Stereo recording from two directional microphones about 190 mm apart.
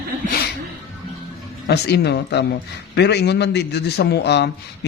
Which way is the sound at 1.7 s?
60° left (ahead or behind).